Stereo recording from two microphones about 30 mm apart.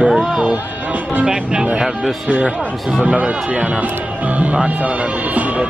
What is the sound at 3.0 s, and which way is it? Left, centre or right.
Speech, right.